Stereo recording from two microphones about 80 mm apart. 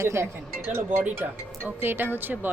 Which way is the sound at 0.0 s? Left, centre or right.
Right.